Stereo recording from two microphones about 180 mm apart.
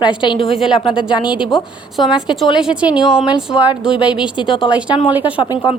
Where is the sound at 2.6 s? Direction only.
5° right (ahead or behind).